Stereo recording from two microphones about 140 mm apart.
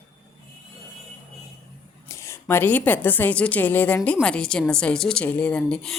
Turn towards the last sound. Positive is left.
turn(degrees=5)  # may be behind; listen again after turning